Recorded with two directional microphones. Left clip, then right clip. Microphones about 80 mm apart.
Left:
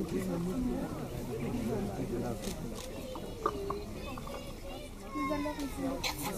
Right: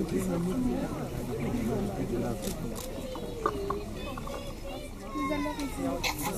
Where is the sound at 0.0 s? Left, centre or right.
Right.